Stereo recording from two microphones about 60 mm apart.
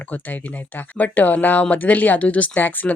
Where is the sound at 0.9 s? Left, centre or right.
Left.